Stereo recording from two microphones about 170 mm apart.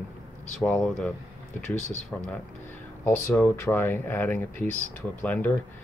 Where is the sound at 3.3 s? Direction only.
10° left (ahead or behind).